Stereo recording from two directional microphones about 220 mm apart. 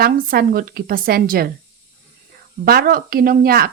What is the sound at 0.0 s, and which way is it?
Speech, 45° right (ahead or behind).